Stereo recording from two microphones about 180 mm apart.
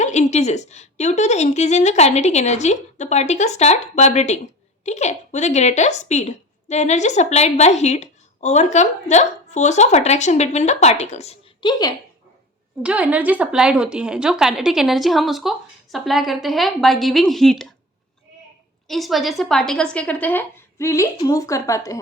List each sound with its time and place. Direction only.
0.0 s a woman's voice: 40° left (ahead or behind)
11.7 s speech: 20° left (ahead or behind)
12.8 s a woman's voice: 5° right (ahead or behind)
18.9 s a woman's voice: centre (ahead or behind); by 21.9 s 20° left (ahead or behind)